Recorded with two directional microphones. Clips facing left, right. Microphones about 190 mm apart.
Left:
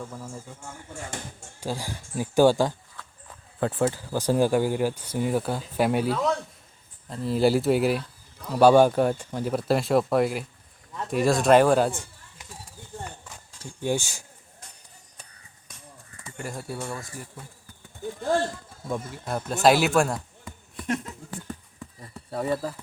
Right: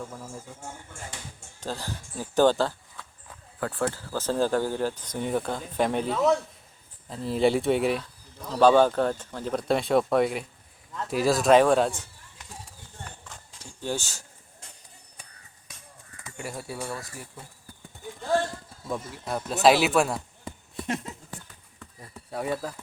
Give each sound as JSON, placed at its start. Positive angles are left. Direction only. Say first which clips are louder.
{"t": 1.6, "sound": "speech", "louder": "left 2 dB", "side_deg": 10}
{"t": 13.8, "sound": "speech", "louder": "left 4 dB", "side_deg": 10}
{"t": 16.4, "sound": "speech", "louder": "left 1 dB", "side_deg": -5}
{"t": 19.2, "sound": "speech", "louder": "even", "side_deg": 0}
{"t": 20.4, "sound": "a sound", "louder": "right 3 dB", "side_deg": -30}
{"t": 22.3, "sound": "speech", "louder": "left 3 dB", "side_deg": 0}